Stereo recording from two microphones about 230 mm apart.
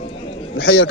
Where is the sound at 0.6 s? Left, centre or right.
Left.